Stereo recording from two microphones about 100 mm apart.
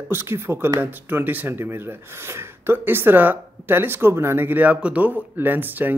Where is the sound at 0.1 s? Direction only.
25° right (ahead or behind).